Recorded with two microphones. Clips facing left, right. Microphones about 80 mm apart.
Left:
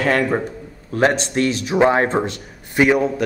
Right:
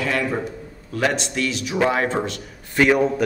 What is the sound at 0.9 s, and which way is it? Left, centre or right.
Speech, left.